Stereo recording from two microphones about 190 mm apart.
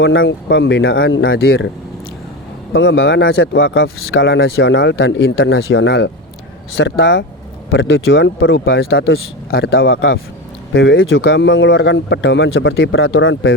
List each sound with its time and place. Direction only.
0.0 s speech: 75° left (ahead or behind)
2.7 s speech: 65° left (ahead or behind)
9.8 s a man's voice: 90° left